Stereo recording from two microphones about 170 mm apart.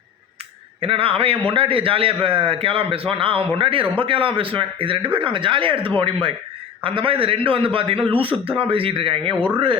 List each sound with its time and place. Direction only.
0.8 s speech: 35° right (ahead or behind)